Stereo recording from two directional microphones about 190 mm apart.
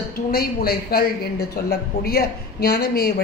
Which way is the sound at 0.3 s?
55° left (ahead or behind).